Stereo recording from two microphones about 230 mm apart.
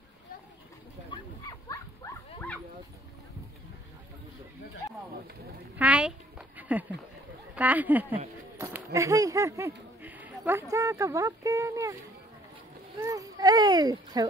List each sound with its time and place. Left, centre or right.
1.7 s dog: centre
5.8 s a sound: centre
7.5 s speech: centre
13.0 s a child's voice: centre